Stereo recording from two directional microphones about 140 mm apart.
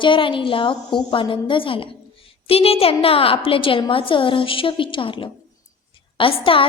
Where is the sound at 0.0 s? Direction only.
35° left (ahead or behind).